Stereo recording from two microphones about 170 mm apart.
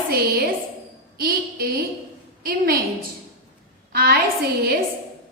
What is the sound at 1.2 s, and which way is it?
A woman's voice, 60° right (ahead or behind).